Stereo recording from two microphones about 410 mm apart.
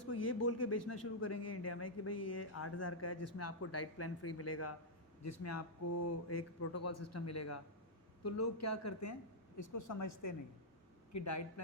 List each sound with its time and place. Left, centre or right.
0.0 s speech: left